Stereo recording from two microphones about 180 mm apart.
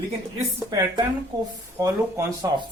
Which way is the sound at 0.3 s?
20° right (ahead or behind).